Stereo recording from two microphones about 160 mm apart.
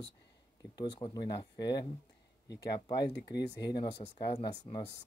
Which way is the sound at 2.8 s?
25° left (ahead or behind).